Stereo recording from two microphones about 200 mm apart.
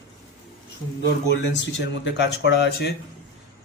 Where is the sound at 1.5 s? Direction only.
60° left (ahead or behind).